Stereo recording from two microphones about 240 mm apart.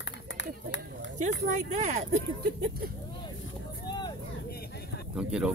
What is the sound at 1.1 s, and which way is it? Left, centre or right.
Speech, right.